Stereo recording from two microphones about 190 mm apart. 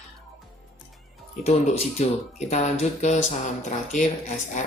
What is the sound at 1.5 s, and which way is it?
Speech, 35° left (ahead or behind).